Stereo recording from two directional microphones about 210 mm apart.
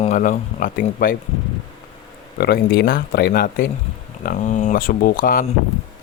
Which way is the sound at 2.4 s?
50° left (ahead or behind).